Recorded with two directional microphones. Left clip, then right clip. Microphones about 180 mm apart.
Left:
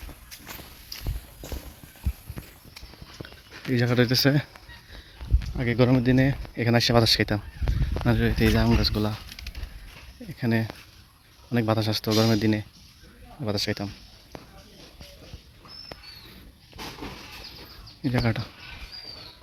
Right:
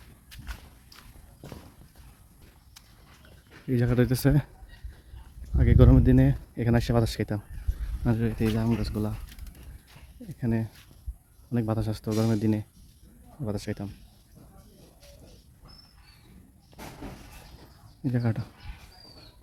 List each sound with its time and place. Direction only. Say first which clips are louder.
3.7 s speech: left 3 dB; 10° right (ahead or behind)
5.5 s speech: left 1 dB; 25° right (ahead or behind); by 9.1 s centre (ahead or behind)
10.4 s speech: left 5 dB; centre (ahead or behind)
12.0 s speech: left 5 dB; 5° left (ahead or behind)
12.4 s speech: left 3 dB; 15° right (ahead or behind)
18.0 s speech: left 5 dB; 10° right (ahead or behind)